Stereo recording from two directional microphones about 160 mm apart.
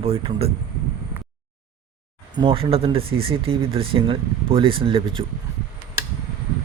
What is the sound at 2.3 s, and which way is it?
Speech, 35° right (ahead or behind).